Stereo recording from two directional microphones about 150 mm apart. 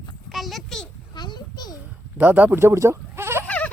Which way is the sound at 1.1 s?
30° left (ahead or behind).